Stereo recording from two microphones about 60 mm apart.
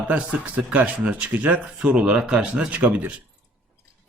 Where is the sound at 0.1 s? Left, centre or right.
Right.